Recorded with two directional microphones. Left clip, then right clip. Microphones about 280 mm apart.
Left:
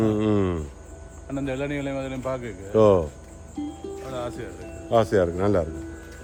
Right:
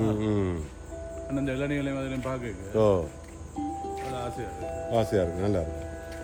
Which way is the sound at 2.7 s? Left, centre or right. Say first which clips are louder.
Left 6 dB; left.